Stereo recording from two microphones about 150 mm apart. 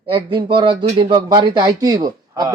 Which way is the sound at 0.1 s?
30° right (ahead or behind).